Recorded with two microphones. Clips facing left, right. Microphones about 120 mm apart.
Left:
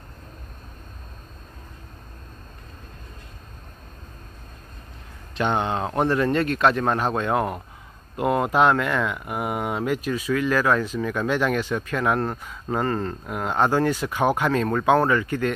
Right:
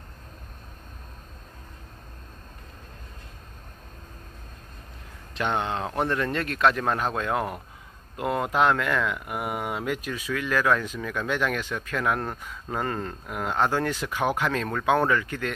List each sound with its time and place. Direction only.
5.3 s speech: centre (ahead or behind)
13.6 s speech: 10° left (ahead or behind)
14.7 s speech: 15° left (ahead or behind)